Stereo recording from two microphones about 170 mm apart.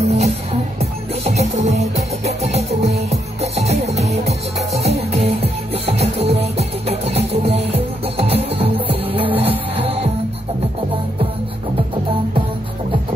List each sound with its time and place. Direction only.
0.0 s music: 40° right (ahead or behind)